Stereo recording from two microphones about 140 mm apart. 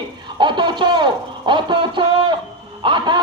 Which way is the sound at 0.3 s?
35° right (ahead or behind).